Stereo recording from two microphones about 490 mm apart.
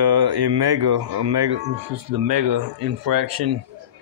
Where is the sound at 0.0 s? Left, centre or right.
Right.